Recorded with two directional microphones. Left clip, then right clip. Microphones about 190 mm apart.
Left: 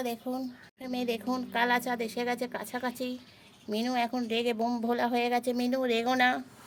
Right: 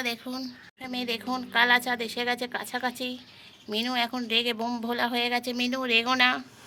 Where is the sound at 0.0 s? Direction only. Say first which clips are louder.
Right 2 dB; 25° left (ahead or behind).